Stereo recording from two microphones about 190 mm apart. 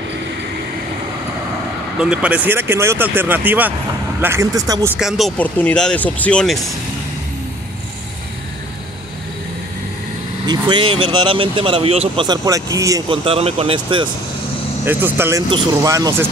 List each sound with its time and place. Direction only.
2.0 s speech: 5° right (ahead or behind)
4.9 s speech: centre (ahead or behind)
10.4 s speech: 25° right (ahead or behind)
13.2 s speech: 30° right (ahead or behind)
14.9 s speech: 10° right (ahead or behind)